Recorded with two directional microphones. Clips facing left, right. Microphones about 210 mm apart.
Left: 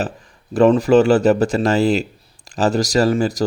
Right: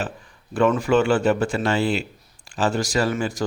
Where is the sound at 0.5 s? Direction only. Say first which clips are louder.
Left 6 dB; 35° left (ahead or behind).